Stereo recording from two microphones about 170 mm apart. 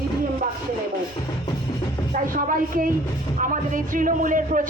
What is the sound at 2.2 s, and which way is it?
A man's voice, 55° right (ahead or behind).